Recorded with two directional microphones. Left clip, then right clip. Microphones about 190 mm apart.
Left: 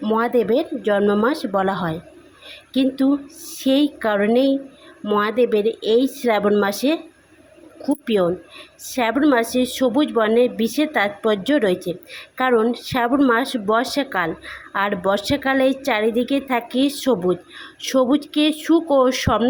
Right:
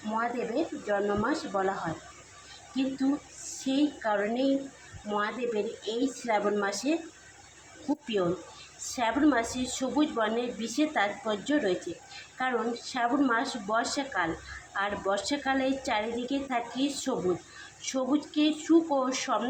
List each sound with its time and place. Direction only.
0.1 s a woman's voice: 45° left (ahead or behind)
3.5 s a woman's voice: 45° left (ahead or behind)
8.0 s a woman's voice: 40° left (ahead or behind)